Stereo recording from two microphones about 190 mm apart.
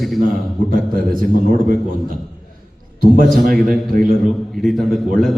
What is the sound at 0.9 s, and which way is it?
Speech, 45° right (ahead or behind).